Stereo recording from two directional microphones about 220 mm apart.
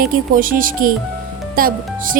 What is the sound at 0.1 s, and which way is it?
Speech, 40° right (ahead or behind).